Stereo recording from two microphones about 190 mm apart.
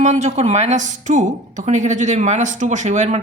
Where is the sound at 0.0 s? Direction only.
40° right (ahead or behind).